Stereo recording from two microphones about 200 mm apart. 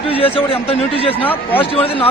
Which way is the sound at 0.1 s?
30° left (ahead or behind).